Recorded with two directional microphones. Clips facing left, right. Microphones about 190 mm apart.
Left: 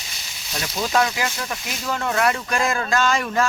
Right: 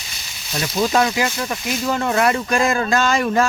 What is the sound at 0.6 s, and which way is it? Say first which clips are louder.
Speech: right 4 dB; 5° right (ahead or behind).